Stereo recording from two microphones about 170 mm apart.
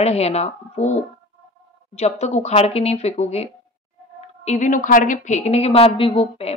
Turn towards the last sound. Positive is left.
turn(degrees=35)  # may be behind; listen again after turning